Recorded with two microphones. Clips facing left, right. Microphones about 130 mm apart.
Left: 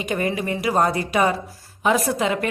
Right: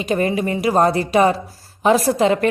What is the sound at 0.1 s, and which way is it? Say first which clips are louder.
A woman's voice: right 5 dB; 30° right (ahead or behind).